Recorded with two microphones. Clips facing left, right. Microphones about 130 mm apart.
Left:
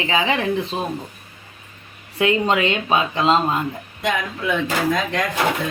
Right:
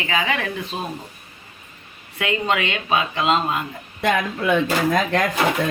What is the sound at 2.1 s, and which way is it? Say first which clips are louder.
Speech: left 4 dB; 30° left (ahead or behind).